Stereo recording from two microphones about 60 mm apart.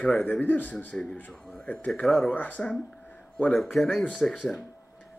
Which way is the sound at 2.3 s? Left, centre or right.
Left.